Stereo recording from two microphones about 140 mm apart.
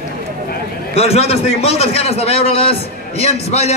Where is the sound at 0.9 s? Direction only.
45° left (ahead or behind).